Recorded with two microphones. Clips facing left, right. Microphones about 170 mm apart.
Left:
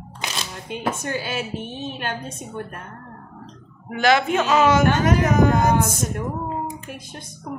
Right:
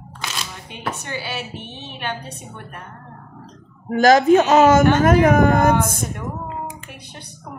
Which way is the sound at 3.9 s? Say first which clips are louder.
Right 6 dB; 40° right (ahead or behind).